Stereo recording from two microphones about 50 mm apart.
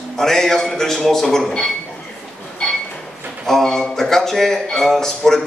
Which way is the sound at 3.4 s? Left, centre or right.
Centre.